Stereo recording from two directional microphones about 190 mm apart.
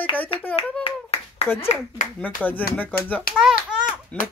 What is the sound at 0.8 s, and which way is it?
Clapping, 30° left (ahead or behind).